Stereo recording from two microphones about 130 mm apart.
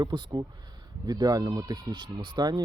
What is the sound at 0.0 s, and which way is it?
Speech, 35° right (ahead or behind).